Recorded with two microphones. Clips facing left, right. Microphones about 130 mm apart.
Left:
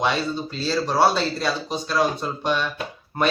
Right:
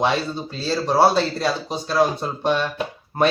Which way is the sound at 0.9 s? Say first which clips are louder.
Right 4 dB; 30° right (ahead or behind).